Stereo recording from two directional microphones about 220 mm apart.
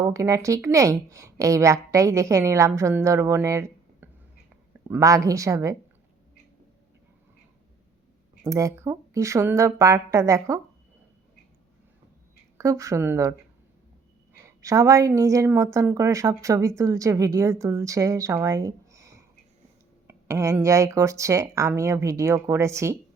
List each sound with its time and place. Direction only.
0.0 s a woman's voice: 15° right (ahead or behind)
8.4 s a woman's voice: 15° right (ahead or behind)
12.5 s a woman's voice: 15° right (ahead or behind)
14.4 s a woman's voice: 15° right (ahead or behind)